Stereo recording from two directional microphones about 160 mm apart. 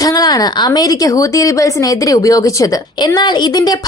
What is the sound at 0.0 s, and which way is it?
A woman's voice, 25° left (ahead or behind).